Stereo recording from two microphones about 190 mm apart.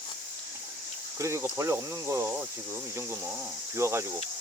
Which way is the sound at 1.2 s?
15° right (ahead or behind).